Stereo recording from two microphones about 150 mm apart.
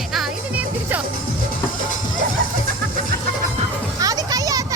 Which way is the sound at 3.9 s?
25° right (ahead or behind).